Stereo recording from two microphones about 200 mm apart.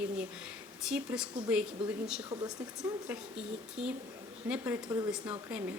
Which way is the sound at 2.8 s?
5° right (ahead or behind).